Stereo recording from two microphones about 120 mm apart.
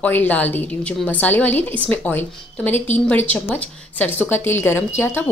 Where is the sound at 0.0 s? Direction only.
15° left (ahead or behind).